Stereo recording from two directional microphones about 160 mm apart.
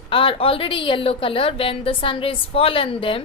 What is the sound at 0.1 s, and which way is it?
A woman's voice, 35° left (ahead or behind).